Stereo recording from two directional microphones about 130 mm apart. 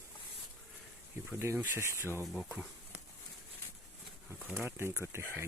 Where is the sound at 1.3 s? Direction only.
15° right (ahead or behind).